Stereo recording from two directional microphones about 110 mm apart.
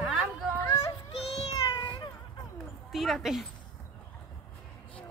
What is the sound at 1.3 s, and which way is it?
Cat, 65° left (ahead or behind).